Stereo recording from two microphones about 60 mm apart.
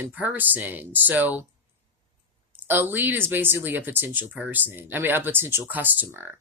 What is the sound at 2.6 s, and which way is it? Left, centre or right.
Speech, right.